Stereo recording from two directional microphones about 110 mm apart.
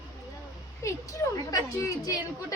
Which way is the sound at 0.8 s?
25° left (ahead or behind).